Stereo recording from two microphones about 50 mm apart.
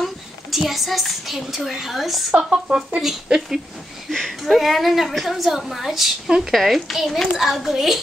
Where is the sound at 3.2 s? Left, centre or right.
Centre.